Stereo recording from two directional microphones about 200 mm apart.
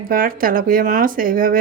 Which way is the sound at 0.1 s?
45° right (ahead or behind).